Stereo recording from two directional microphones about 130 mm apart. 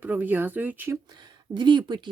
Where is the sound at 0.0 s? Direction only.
15° right (ahead or behind).